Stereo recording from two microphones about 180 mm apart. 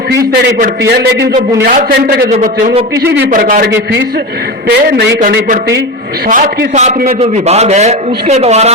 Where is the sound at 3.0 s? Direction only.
75° right (ahead or behind).